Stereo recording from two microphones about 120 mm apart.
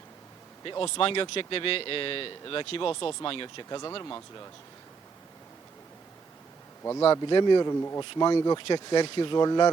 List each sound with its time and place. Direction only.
0.6 s speech: 45° left (ahead or behind)
7.1 s speech: 40° left (ahead or behind)
7.7 s speech: 20° left (ahead or behind)
8.1 s speech: 40° left (ahead or behind)